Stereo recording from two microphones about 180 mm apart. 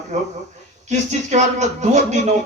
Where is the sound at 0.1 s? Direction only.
40° right (ahead or behind).